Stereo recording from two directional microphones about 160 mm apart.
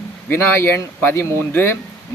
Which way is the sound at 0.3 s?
15° left (ahead or behind).